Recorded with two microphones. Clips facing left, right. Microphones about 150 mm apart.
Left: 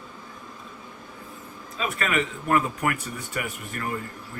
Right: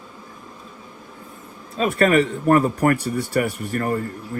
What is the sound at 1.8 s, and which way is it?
A man's voice, 40° right (ahead or behind).